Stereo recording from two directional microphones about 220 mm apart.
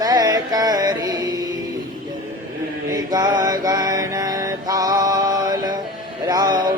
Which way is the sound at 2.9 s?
15° right (ahead or behind).